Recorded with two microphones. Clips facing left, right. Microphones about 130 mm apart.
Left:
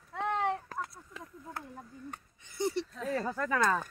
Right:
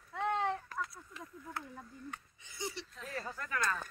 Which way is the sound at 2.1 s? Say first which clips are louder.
Left 3 dB; 55° left (ahead or behind).